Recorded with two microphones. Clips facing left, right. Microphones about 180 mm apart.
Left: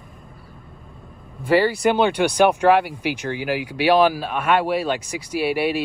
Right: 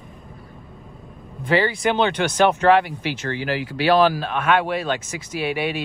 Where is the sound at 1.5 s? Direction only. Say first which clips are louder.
Left 3 dB; 5° left (ahead or behind).